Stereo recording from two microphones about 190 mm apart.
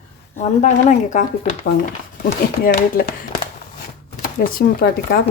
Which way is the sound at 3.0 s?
50° left (ahead or behind).